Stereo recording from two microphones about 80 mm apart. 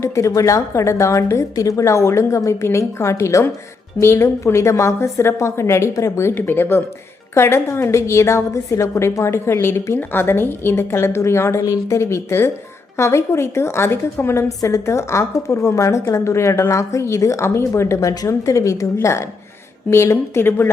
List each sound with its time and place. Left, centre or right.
0.0 s a woman's voice: left